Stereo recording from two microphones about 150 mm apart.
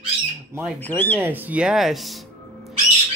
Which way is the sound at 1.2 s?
10° right (ahead or behind).